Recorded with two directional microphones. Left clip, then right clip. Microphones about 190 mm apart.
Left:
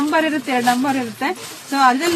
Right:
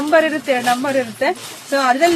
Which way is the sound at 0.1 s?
20° right (ahead or behind).